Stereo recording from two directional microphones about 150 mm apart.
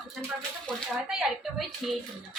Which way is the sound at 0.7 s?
5° left (ahead or behind).